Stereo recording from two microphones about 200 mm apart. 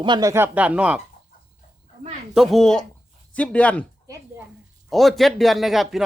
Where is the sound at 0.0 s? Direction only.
20° right (ahead or behind).